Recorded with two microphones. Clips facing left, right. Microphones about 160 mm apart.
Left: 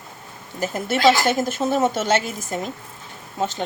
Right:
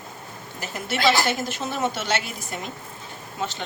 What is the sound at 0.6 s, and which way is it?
A woman's voice, 45° left (ahead or behind).